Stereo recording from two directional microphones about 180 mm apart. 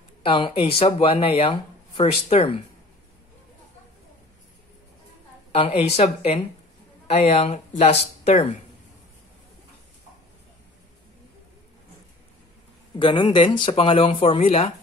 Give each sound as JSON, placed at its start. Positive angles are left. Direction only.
{"t": 0.2, "sound": "speech", "side_deg": 30}
{"t": 5.5, "sound": "speech", "side_deg": 35}
{"t": 13.0, "sound": "speech", "side_deg": 25}